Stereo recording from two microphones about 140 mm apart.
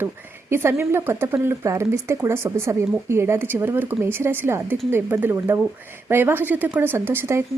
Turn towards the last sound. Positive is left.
turn(degrees=-15)  # may be behind; listen again after turning